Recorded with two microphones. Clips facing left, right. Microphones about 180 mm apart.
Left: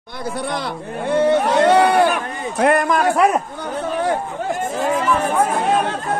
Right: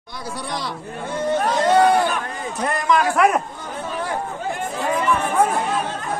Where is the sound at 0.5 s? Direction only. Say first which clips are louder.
Left 4 dB; 60° left (ahead or behind).